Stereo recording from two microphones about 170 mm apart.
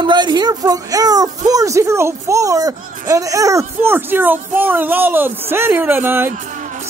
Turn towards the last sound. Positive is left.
turn(degrees=-15)  # may be behind; listen again after turning